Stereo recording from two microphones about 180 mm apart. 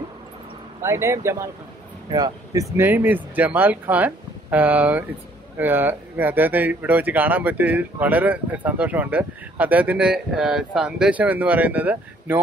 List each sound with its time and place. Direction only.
0.8 s speech: 15° right (ahead or behind)